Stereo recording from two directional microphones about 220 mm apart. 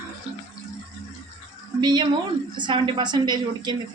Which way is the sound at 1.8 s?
20° right (ahead or behind).